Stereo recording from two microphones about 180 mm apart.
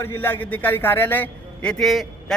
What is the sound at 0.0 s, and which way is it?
A man's voice, 10° left (ahead or behind).